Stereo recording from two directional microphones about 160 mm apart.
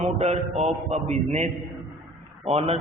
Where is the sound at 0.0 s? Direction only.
45° right (ahead or behind).